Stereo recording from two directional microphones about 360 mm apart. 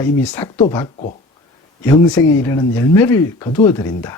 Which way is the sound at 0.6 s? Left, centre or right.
Centre.